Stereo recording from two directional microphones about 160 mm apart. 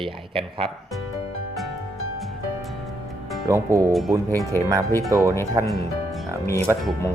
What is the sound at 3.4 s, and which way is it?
Speech, 20° right (ahead or behind).